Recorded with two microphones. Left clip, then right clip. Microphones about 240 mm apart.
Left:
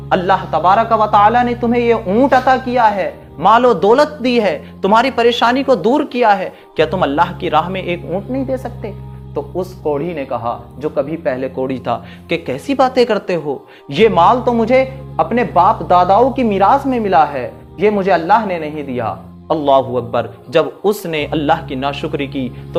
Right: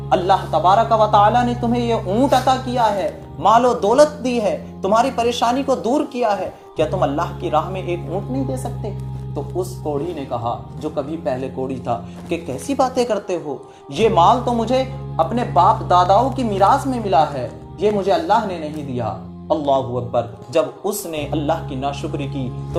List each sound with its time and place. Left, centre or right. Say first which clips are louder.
0.1 s speech: left 2 dB; left
10.2 s speech: left 4 dB; left